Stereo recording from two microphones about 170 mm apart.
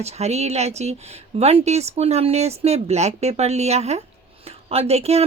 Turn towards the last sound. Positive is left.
turn(degrees=-40)  # may be behind; listen again after turning